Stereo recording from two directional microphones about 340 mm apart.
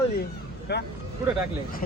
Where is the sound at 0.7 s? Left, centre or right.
Left.